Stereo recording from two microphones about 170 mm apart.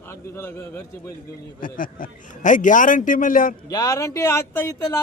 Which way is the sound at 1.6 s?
55° left (ahead or behind).